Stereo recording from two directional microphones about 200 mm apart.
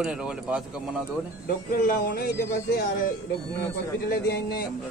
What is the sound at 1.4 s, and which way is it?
Music, 40° left (ahead or behind).